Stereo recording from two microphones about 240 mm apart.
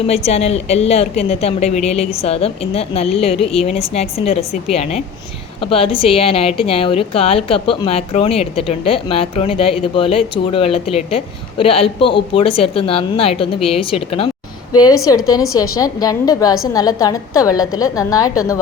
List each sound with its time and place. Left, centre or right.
0.3 s a woman's voice: left